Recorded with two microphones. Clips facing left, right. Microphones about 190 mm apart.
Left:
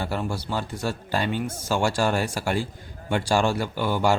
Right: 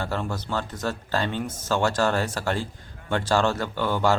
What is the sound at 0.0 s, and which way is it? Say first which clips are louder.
A man's voice: left 1 dB; 10° left (ahead or behind).